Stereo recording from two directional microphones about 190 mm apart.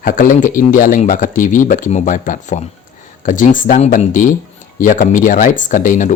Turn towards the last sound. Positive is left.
turn(degrees=45)  # may be behind; listen again after turning